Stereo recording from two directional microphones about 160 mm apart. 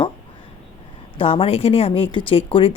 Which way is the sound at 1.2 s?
35° left (ahead or behind).